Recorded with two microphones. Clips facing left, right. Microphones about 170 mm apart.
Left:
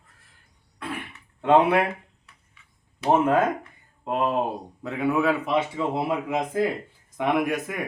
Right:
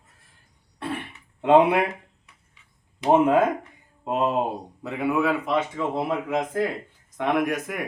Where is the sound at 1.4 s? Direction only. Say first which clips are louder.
Right 2 dB; 15° right (ahead or behind).